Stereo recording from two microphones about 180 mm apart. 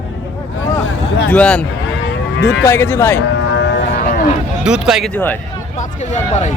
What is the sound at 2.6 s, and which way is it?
Speech, 10° left (ahead or behind).